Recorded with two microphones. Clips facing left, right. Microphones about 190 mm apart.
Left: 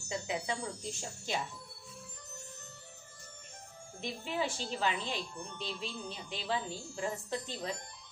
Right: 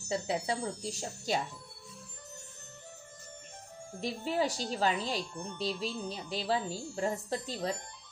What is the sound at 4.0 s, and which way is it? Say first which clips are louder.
Speech: right 4 dB; 40° right (ahead or behind).